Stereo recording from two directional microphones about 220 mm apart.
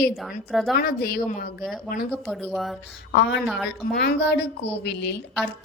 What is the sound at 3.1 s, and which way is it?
A woman's voice, 50° left (ahead or behind).